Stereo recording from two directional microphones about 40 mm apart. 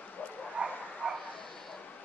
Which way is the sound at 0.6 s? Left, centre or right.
Right.